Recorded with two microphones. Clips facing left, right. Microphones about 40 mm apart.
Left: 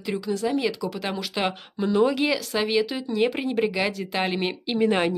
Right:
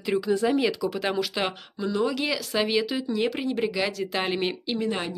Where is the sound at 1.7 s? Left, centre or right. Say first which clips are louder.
Left 5 dB; left.